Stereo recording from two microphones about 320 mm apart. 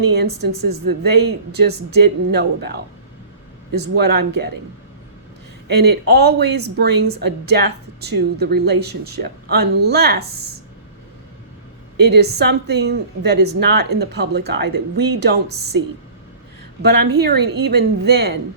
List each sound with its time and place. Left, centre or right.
0.0 s speech: right
3.8 s speech: right
5.6 s speech: right
7.2 s a woman's voice: right
7.5 s speech: right
11.9 s speech: right
16.8 s speech: right